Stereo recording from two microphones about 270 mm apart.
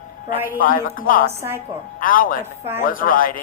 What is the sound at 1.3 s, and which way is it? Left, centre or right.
Speech, centre.